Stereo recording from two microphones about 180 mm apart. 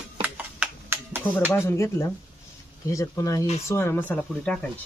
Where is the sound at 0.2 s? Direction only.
10° right (ahead or behind).